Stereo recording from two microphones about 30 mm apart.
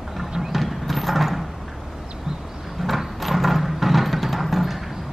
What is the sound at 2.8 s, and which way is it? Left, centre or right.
Music, centre.